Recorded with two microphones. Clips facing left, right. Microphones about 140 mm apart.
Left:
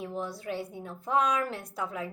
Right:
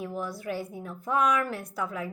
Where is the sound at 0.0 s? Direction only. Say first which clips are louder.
Right 1 dB; 25° left (ahead or behind).